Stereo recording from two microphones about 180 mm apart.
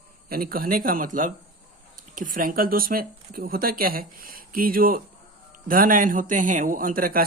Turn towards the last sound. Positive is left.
turn(degrees=-50)  # may be behind; listen again after turning